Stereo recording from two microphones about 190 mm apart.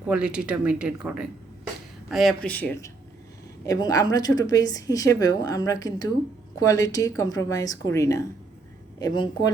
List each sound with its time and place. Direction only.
0.1 s a woman's voice: 5° right (ahead or behind); by 9.5 s 20° left (ahead or behind)